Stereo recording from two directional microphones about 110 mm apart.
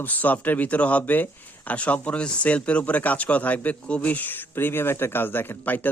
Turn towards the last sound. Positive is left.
turn(degrees=15)  # may be behind; listen again after turning